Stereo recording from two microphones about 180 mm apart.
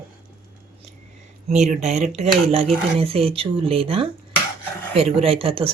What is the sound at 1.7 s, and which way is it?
Speech, 40° right (ahead or behind).